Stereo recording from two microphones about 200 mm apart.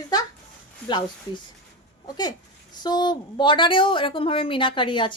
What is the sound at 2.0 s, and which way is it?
A woman's voice, 20° left (ahead or behind).